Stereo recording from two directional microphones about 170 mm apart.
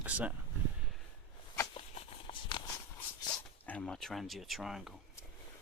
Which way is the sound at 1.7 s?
30° left (ahead or behind).